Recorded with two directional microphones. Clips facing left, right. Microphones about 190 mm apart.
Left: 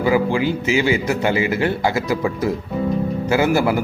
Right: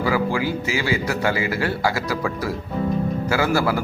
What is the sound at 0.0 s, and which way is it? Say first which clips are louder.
Speech: left 4 dB; 20° left (ahead or behind).